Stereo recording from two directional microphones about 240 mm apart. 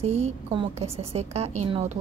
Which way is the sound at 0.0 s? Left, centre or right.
Right.